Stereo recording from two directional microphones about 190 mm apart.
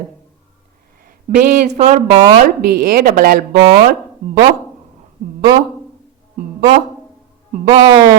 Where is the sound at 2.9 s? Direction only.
50° right (ahead or behind).